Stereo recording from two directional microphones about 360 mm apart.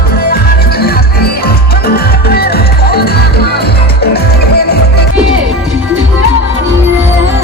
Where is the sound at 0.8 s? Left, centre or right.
Left.